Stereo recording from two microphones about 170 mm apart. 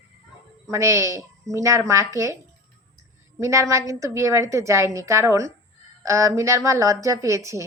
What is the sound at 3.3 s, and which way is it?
A woman's voice, 15° right (ahead or behind).